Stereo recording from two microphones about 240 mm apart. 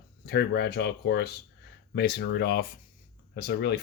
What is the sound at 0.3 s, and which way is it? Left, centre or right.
Speech, left.